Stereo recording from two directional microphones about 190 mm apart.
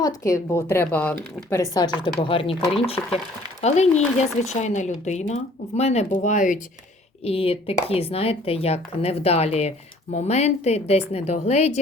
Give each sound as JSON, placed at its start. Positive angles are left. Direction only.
{"t": 0.0, "sound": "speech", "side_deg": 15}
{"t": 7.3, "sound": "speech", "side_deg": 30}